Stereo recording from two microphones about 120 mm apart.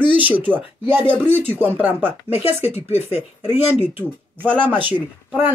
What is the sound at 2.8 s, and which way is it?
Speech, 60° left (ahead or behind).